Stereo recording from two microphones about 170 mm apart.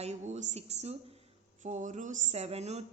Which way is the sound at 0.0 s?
40° right (ahead or behind).